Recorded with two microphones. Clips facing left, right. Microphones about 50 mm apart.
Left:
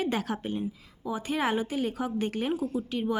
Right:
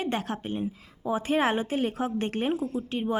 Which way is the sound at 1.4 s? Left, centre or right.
Right.